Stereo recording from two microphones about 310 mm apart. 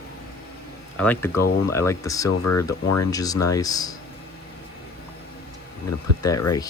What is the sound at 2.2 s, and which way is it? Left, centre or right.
Speech, left.